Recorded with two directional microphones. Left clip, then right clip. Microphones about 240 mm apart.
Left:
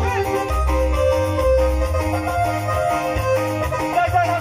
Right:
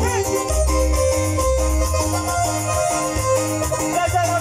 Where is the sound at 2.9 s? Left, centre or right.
Centre.